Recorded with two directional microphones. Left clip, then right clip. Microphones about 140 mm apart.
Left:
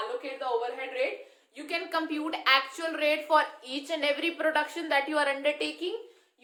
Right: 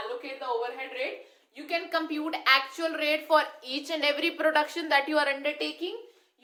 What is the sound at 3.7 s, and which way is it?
A woman's voice, 35° right (ahead or behind).